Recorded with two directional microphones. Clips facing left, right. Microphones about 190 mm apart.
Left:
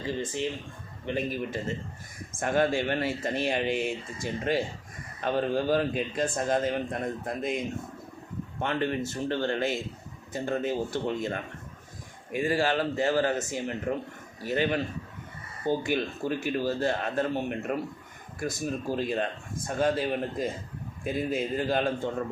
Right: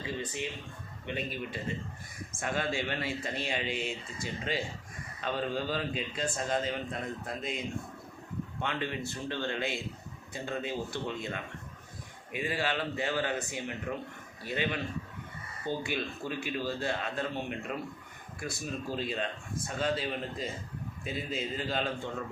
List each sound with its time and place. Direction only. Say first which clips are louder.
1.0 s a man's voice: left 6 dB; 40° left (ahead or behind)
8.6 s a man's voice: left 7 dB; 45° left (ahead or behind)